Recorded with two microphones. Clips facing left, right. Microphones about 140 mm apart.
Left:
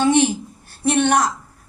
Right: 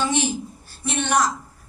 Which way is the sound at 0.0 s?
60° left (ahead or behind).